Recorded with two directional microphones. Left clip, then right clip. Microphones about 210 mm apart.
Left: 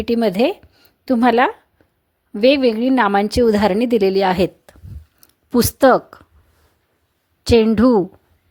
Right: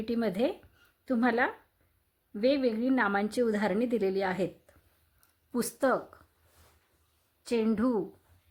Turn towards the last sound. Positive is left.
turn(degrees=40)  # may be behind; listen again after turning